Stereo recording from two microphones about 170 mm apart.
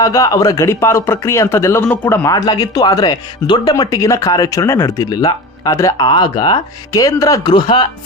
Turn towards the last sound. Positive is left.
turn(degrees=25)  # may be behind; listen again after turning